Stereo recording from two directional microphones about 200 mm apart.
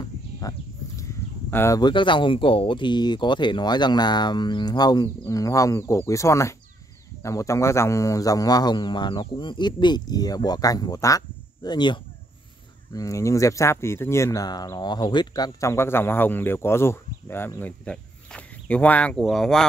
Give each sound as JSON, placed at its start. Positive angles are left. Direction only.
{"t": 0.0, "sound": "horse", "side_deg": 20}
{"t": 1.5, "sound": "speech", "side_deg": 15}